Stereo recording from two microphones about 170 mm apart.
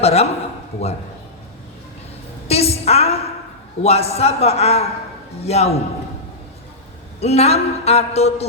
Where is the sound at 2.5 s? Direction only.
35° left (ahead or behind).